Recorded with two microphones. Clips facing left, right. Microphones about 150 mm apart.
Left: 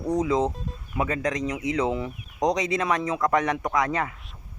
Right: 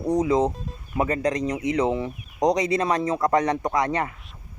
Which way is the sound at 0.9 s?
35° right (ahead or behind).